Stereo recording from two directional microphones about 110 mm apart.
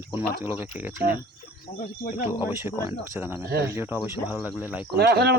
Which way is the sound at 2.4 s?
20° right (ahead or behind).